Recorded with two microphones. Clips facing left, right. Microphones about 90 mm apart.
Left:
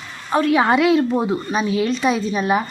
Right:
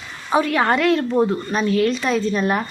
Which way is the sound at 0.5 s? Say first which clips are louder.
Left 5 dB; 5° left (ahead or behind).